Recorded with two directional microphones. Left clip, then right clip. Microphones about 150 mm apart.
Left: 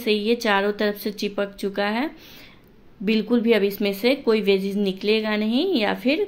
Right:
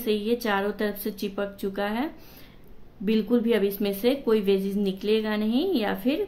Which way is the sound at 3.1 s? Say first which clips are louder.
Left 4 dB; 5° left (ahead or behind).